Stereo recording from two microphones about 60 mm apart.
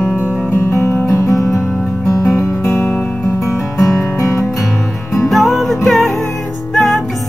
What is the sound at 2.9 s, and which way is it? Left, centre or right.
Music, centre.